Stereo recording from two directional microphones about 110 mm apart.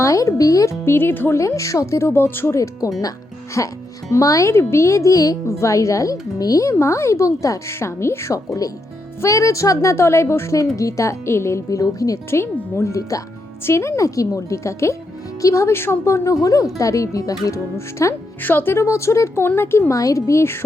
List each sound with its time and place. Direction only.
0.0 s speech: 30° left (ahead or behind)
18.4 s speech: 20° left (ahead or behind)